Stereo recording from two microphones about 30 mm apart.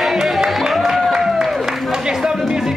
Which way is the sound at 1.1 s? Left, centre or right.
Centre.